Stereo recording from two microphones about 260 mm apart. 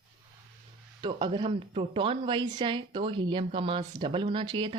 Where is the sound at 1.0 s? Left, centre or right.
Centre.